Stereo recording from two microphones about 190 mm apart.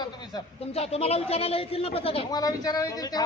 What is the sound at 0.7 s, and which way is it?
A woman's voice, 30° left (ahead or behind).